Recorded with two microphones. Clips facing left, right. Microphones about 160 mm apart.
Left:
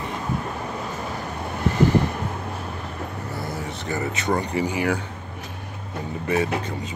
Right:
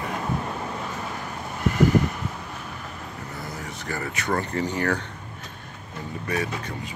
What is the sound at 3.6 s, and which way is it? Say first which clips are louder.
Speech: left 3 dB; 25° left (ahead or behind).